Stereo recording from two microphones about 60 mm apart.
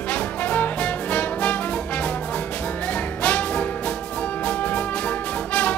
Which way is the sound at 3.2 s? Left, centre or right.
Left.